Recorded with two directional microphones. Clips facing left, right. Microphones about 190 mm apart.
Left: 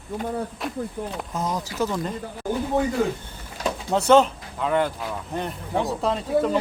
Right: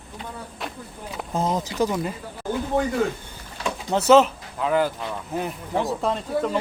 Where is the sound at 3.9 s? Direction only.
Centre (ahead or behind).